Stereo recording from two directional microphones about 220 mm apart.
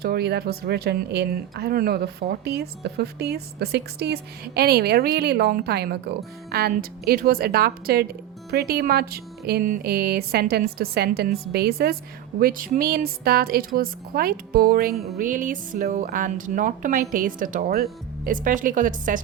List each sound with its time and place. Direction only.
0.0 s speech: 45° right (ahead or behind)